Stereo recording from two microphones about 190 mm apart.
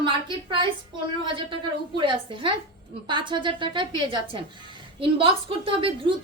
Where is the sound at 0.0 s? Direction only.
25° right (ahead or behind).